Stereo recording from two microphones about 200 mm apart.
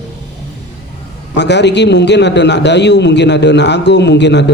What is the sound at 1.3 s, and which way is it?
A man's voice, 60° left (ahead or behind).